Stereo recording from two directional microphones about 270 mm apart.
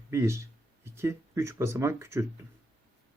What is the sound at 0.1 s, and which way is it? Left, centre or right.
Speech, centre.